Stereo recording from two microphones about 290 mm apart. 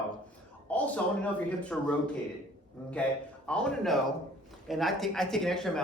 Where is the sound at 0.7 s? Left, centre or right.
Centre.